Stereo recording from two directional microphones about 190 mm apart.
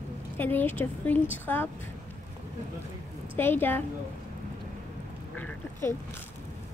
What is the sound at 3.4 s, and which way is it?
Speech, 10° left (ahead or behind).